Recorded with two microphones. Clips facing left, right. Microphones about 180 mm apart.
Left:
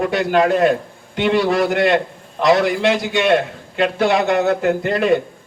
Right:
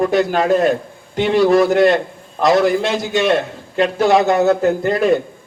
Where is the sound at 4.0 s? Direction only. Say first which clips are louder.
Right 3 dB; 45° right (ahead or behind).